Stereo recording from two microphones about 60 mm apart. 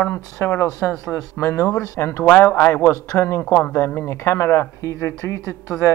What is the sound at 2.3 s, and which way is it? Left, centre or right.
Speech, left.